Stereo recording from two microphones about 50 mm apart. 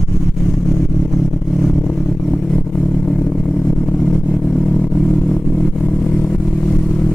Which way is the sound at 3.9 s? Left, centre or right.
Centre.